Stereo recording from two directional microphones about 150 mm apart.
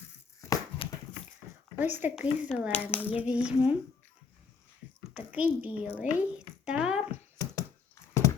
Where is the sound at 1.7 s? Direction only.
10° right (ahead or behind).